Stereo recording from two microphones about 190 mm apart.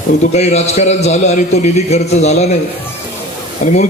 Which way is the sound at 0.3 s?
35° left (ahead or behind).